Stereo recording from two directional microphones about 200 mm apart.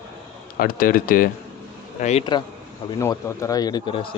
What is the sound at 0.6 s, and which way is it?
Speech, 45° left (ahead or behind).